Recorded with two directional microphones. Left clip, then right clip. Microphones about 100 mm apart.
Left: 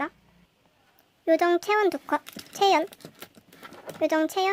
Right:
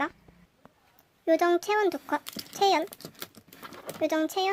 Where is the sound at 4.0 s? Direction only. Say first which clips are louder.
Left 3 dB; 25° left (ahead or behind).